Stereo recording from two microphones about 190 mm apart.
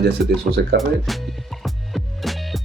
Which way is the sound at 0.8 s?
Centre (ahead or behind).